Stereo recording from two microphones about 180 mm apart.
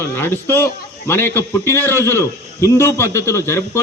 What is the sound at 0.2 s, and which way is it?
A man's voice, 10° left (ahead or behind).